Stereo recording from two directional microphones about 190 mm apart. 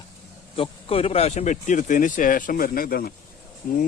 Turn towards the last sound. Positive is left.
turn(degrees=45)  # may be behind; listen again after turning